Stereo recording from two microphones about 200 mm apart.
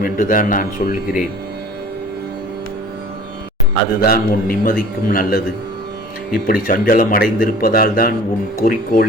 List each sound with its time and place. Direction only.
0.0 s speech: 45° left (ahead or behind)
4.0 s speech: 45° left (ahead or behind)